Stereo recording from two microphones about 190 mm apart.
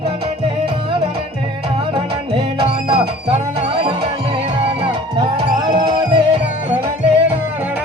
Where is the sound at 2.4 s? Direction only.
25° right (ahead or behind).